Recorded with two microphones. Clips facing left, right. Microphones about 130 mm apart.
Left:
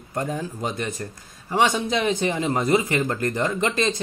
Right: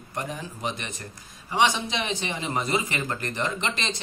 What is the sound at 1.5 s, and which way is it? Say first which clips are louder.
Speech: left 3 dB; 45° left (ahead or behind).